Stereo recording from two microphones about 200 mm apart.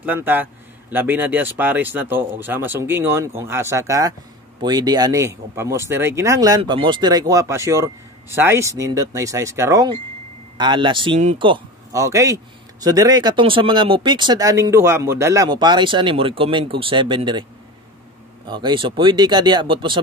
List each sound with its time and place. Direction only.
0.0 s a man's voice: 10° right (ahead or behind)
18.5 s speech: 25° right (ahead or behind)